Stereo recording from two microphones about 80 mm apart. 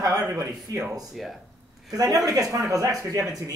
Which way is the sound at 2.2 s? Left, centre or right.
Right.